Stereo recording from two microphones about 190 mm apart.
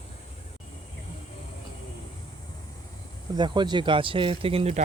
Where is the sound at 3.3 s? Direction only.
25° right (ahead or behind).